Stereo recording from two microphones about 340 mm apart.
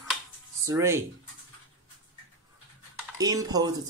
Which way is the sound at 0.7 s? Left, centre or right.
Centre.